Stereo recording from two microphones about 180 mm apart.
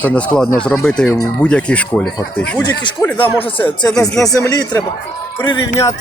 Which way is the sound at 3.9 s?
5° left (ahead or behind).